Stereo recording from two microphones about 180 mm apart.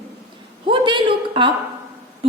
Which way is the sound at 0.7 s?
25° right (ahead or behind).